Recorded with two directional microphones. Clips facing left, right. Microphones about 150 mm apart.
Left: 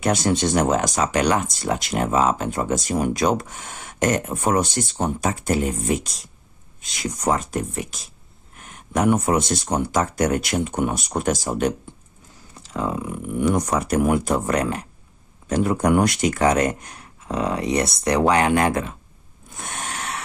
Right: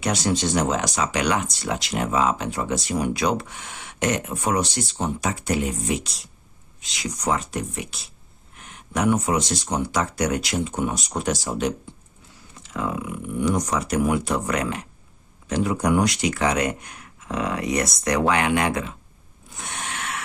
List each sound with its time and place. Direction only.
0.0 s speech: 50° left (ahead or behind)
12.5 s speech: 35° left (ahead or behind)
13.4 s speech: 55° left (ahead or behind)
19.5 s a sound: 45° left (ahead or behind)